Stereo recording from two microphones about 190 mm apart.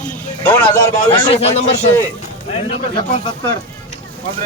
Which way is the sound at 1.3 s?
35° left (ahead or behind).